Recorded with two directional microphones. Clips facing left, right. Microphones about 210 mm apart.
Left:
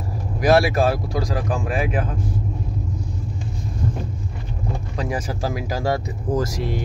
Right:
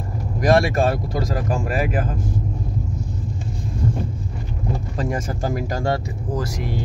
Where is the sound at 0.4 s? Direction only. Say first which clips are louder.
Left 1 dB; 5° left (ahead or behind).